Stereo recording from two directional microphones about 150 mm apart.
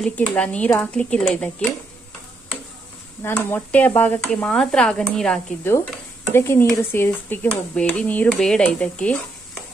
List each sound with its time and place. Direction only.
0.0 s speech: 5° left (ahead or behind)
3.2 s speech: 15° left (ahead or behind)
6.3 s speech: 15° left (ahead or behind)